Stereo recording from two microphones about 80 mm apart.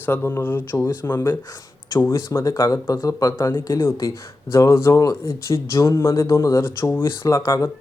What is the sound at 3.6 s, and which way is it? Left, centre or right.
Speech, left.